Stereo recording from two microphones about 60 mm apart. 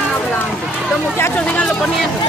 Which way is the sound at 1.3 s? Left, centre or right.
Left.